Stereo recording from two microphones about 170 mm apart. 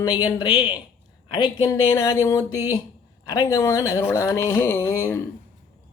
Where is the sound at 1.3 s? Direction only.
25° left (ahead or behind).